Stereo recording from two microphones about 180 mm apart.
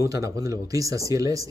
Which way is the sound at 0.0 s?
20° right (ahead or behind).